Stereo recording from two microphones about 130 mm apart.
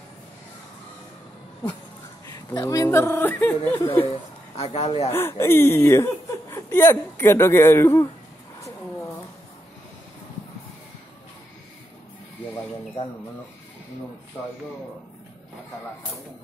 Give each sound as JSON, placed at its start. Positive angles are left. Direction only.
{"t": 2.3, "sound": "speech", "side_deg": 30}
{"t": 4.1, "sound": "a man's voice", "side_deg": 50}
{"t": 5.1, "sound": "speech", "side_deg": 20}